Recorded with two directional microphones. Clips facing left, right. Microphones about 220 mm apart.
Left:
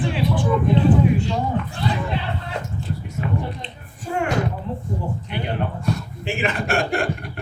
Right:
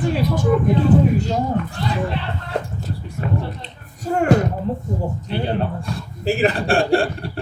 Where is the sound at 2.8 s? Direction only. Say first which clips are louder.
Right 1 dB; 40° right (ahead or behind).